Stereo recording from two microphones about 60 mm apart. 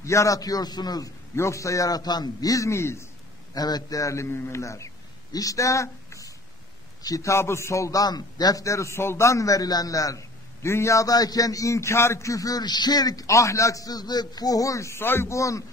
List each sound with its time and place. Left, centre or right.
0.0 s a man's voice: left
1.3 s a man's voice: left
2.7 s speech: left
3.5 s a man's voice: left
7.0 s a man's voice: left
10.6 s a man's voice: left
15.0 s speech: left